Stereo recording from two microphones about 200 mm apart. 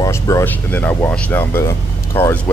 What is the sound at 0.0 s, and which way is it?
Speech, 15° left (ahead or behind).